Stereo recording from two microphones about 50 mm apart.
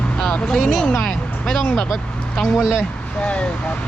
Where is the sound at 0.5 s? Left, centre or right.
Centre.